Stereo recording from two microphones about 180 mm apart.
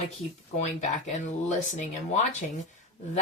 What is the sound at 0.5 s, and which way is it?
Speech, 40° left (ahead or behind).